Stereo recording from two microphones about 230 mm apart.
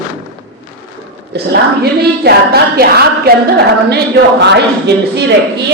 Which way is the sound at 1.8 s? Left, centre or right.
Right.